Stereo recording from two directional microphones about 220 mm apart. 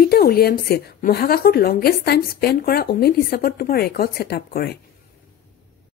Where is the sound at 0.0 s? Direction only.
45° left (ahead or behind).